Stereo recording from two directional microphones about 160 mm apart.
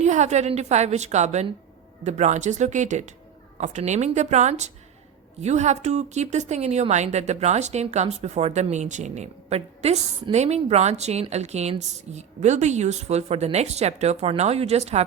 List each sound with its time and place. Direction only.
0.0 s a woman's voice: 45° right (ahead or behind)